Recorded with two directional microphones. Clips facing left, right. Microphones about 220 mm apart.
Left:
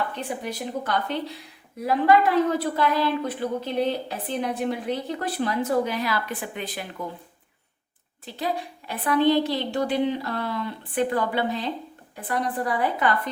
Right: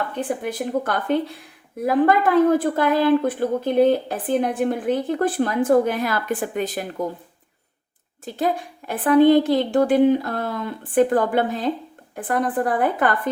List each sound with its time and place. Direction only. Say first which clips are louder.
0.2 s a woman's voice: right 6 dB; 50° right (ahead or behind)
8.2 s a woman's voice: right 5 dB; 50° right (ahead or behind)